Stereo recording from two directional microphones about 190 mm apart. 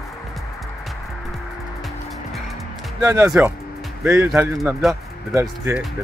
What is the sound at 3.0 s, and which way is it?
Speech, 15° right (ahead or behind).